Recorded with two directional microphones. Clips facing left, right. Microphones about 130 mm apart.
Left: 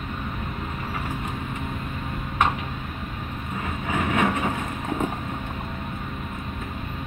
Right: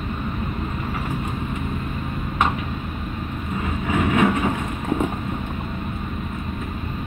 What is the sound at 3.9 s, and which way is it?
Vehicle, 15° right (ahead or behind).